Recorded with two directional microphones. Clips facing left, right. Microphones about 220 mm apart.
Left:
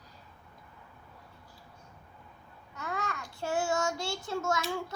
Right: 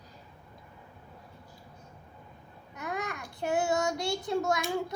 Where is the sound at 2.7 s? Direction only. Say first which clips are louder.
Right 1 dB; 20° right (ahead or behind).